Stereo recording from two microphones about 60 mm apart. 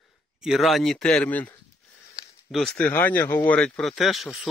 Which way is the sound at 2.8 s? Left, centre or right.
Left.